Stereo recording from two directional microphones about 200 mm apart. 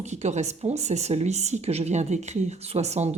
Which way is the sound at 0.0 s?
35° right (ahead or behind).